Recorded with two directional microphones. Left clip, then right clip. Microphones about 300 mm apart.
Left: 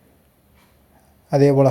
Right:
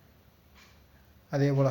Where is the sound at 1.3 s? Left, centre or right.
Left.